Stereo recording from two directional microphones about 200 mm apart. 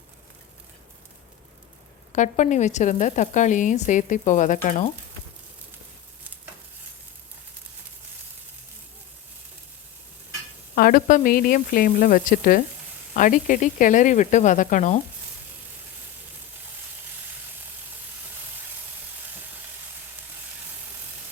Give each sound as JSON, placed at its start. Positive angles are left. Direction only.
{"t": 2.1, "sound": "a woman's voice", "side_deg": 35}
{"t": 10.8, "sound": "a woman's voice", "side_deg": 45}